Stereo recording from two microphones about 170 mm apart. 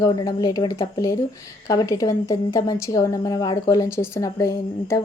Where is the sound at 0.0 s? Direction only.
20° left (ahead or behind).